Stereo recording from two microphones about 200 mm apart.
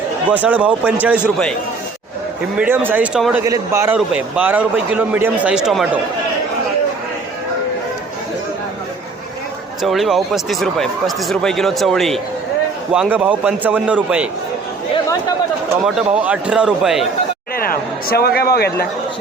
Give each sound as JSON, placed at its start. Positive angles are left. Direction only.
{"t": 0.3, "sound": "a man's voice", "side_deg": -5}
{"t": 2.6, "sound": "a man's voice", "side_deg": -10}
{"t": 3.4, "sound": "a man's voice", "side_deg": -15}
{"t": 9.8, "sound": "speech", "side_deg": 0}
{"t": 15.8, "sound": "speech", "side_deg": -5}
{"t": 17.6, "sound": "speech", "side_deg": 50}